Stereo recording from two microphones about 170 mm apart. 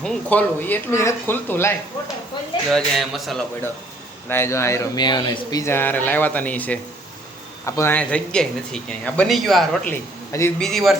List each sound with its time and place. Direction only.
0.0 s speech: 5° left (ahead or behind)
2.7 s a man's voice: centre (ahead or behind)
4.3 s speech: 15° left (ahead or behind)
9.9 s a man's voice: 15° left (ahead or behind)
10.6 s a man's voice: centre (ahead or behind)